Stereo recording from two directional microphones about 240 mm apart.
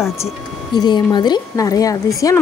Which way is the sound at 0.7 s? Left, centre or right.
Centre.